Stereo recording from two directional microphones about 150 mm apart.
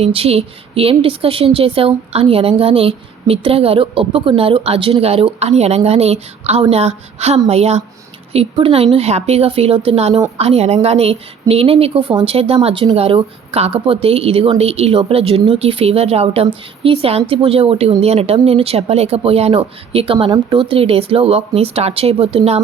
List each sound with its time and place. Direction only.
0.0 s speech: 40° right (ahead or behind)